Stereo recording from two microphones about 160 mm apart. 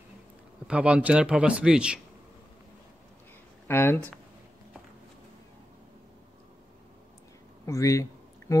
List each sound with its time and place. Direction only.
0.7 s speech: 5° right (ahead or behind)
3.6 s speech: 15° left (ahead or behind)
7.6 s a sound: 20° left (ahead or behind)